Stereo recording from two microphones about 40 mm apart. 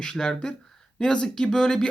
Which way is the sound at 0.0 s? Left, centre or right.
Centre.